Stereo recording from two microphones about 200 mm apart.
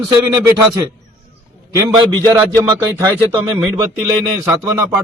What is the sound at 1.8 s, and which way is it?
Speech, 20° right (ahead or behind).